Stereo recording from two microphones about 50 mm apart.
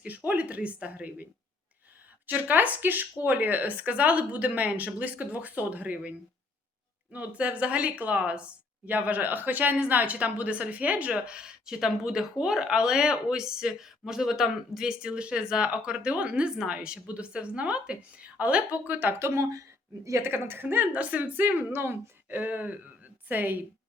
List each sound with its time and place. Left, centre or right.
0.0 s a woman's voice: right
19.2 s speech: right
20.2 s a woman's voice: right
20.9 s speech: right
22.4 s speech: right